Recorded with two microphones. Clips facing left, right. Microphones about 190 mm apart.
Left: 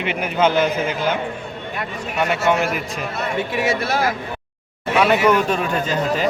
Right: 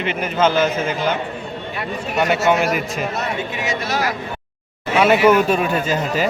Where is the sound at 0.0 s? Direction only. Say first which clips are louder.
Even; 10° left (ahead or behind).